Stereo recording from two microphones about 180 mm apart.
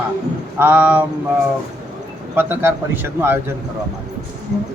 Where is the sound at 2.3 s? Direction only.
10° right (ahead or behind).